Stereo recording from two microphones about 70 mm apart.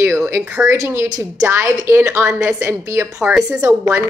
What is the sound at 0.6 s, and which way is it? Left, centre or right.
A woman's voice, right.